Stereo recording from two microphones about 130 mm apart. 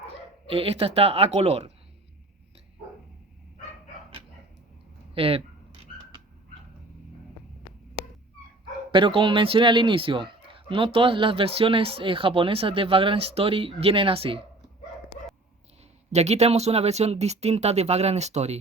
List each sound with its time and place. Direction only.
0.4 s speech: 45° right (ahead or behind)
5.1 s speech: 45° right (ahead or behind)
8.9 s speech: 40° right (ahead or behind)
16.1 s speech: 55° right (ahead or behind)